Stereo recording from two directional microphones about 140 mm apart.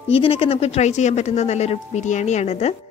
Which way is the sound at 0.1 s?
45° left (ahead or behind).